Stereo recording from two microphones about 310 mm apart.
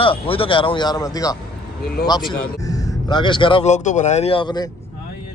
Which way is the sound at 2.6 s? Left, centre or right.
Centre.